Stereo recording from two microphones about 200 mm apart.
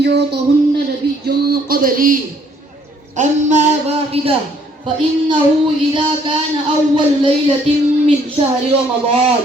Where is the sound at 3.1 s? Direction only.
35° right (ahead or behind).